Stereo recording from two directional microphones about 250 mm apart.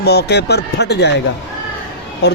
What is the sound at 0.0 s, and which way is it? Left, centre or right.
Speech, left.